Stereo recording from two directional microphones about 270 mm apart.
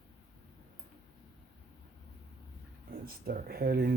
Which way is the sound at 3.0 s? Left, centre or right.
Right.